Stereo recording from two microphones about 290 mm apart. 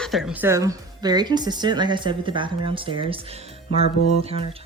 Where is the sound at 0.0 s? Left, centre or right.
Centre; by 4.4 s right.